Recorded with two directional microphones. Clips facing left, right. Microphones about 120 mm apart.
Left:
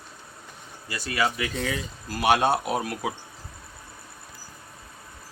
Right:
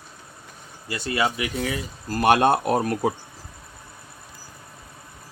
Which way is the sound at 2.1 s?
50° right (ahead or behind).